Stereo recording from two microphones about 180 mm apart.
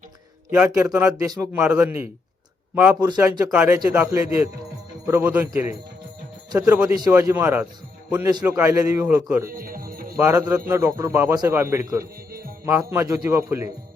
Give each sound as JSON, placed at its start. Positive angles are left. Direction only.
{"t": 0.5, "sound": "speech", "side_deg": -5}
{"t": 1.5, "sound": "speech", "side_deg": -5}
{"t": 6.9, "sound": "speech", "side_deg": -20}
{"t": 9.5, "sound": "music", "side_deg": -50}
{"t": 10.2, "sound": "speech", "side_deg": -15}